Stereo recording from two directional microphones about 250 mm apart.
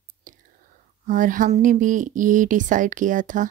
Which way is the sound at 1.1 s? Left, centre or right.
Right.